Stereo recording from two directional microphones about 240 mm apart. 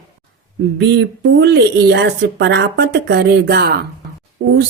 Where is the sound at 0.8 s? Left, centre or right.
Right.